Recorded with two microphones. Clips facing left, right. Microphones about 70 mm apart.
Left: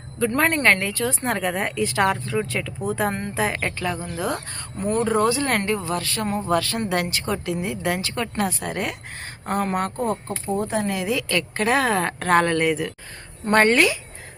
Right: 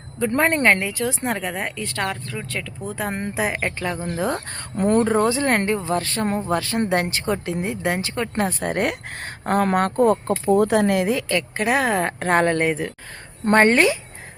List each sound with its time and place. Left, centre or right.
0.3 s speech: right; by 3.1 s centre
3.1 s speech: centre
4.0 s speech: right
8.4 s a woman's voice: right
10.2 s speech: right
11.3 s speech: centre